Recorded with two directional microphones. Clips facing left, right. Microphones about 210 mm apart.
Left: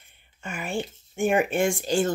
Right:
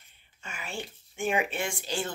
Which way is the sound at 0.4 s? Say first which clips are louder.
Left 8 dB; 55° left (ahead or behind).